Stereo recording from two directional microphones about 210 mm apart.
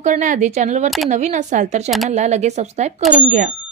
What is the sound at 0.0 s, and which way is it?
Speech, 35° right (ahead or behind).